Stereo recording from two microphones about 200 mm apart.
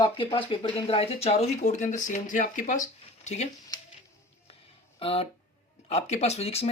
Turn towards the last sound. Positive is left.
turn(degrees=30)  # may be behind; listen again after turning